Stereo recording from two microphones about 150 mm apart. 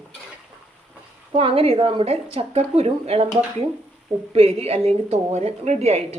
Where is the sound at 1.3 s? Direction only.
40° right (ahead or behind).